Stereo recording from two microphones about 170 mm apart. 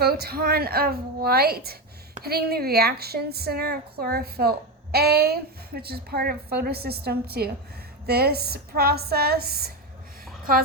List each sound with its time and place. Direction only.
0.0 s a woman's voice: 65° right (ahead or behind)